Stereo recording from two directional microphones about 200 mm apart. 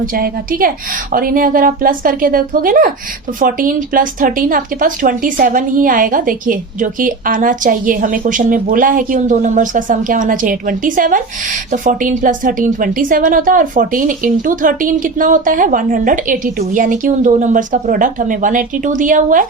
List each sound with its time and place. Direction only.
1.1 s speech: 45° right (ahead or behind)